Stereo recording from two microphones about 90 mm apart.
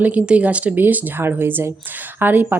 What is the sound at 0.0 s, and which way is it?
Speech, 15° right (ahead or behind).